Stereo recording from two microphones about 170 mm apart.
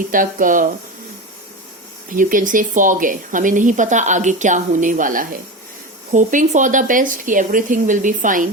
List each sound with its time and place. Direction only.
0.1 s a woman's voice: 50° right (ahead or behind)
2.0 s a woman's voice: 50° right (ahead or behind)